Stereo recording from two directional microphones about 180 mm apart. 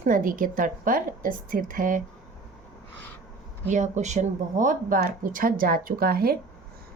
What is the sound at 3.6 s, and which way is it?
A woman's voice, 40° right (ahead or behind).